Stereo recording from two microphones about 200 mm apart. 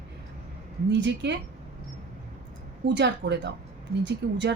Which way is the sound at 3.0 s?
60° right (ahead or behind).